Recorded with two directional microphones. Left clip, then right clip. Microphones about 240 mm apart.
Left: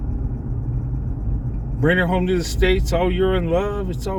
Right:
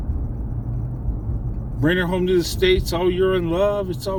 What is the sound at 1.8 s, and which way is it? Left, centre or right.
Speech, centre.